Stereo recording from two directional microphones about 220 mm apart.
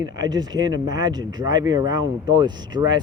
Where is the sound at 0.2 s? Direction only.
20° right (ahead or behind).